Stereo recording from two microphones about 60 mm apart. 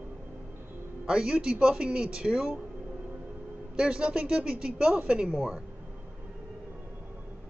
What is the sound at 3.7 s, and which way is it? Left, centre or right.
Speech, centre.